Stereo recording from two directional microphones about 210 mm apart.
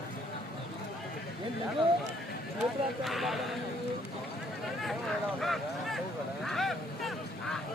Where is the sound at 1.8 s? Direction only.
25° right (ahead or behind).